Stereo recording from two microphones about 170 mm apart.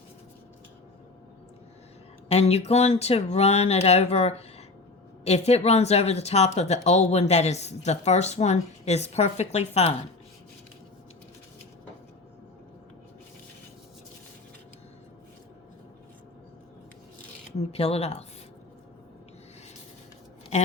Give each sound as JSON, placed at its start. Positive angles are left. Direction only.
{"t": 2.3, "sound": "speech", "side_deg": 40}
{"t": 17.6, "sound": "speech", "side_deg": 35}